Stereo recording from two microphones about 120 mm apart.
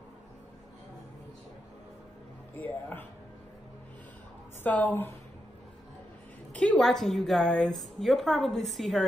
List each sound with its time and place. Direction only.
2.5 s speech: 15° left (ahead or behind)
4.6 s speech: 10° left (ahead or behind)
6.5 s a woman's voice: 10° left (ahead or behind)